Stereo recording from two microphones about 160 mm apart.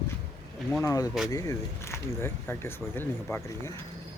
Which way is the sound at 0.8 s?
20° left (ahead or behind).